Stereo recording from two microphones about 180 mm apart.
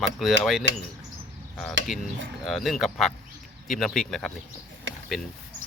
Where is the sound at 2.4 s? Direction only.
Centre (ahead or behind).